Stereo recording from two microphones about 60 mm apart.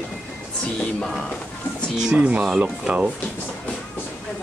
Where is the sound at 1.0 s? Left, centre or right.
Centre.